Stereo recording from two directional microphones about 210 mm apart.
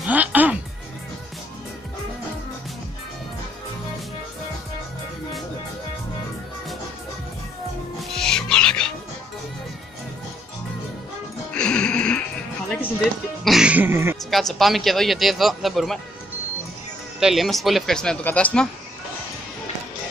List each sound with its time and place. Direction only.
0.0 s music: 5° right (ahead or behind)
8.1 s music: 5° left (ahead or behind)
11.5 s music: 5° left (ahead or behind); by 14.1 s 10° right (ahead or behind)
14.3 s a man's voice: centre (ahead or behind)
17.2 s a man's voice: centre (ahead or behind)